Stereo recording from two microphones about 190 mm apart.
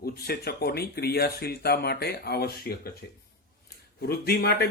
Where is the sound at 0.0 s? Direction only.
55° left (ahead or behind).